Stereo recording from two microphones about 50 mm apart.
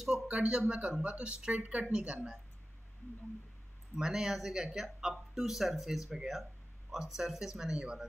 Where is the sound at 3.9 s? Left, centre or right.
Centre.